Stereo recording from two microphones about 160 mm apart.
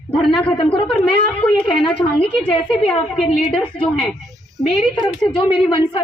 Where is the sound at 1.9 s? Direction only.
10° left (ahead or behind).